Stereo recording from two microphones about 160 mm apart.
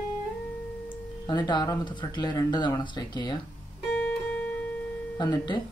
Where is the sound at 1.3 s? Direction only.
25° left (ahead or behind).